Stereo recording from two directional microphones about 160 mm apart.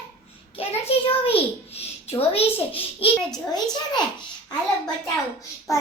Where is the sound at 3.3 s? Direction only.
25° left (ahead or behind).